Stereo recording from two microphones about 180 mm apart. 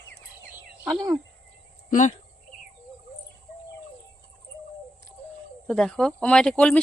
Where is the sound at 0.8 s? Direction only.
20° right (ahead or behind).